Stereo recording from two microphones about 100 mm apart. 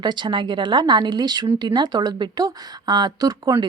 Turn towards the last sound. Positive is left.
turn(degrees=-40)  # may be behind; listen again after turning